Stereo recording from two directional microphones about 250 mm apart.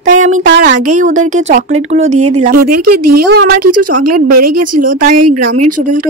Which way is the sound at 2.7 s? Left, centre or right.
Right.